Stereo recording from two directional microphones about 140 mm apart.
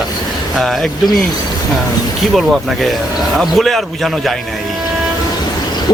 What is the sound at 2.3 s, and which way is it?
Speech, centre (ahead or behind).